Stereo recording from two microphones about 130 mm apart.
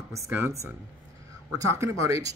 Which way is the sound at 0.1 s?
25° right (ahead or behind).